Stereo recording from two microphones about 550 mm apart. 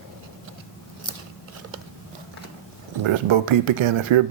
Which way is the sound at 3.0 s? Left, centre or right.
Right.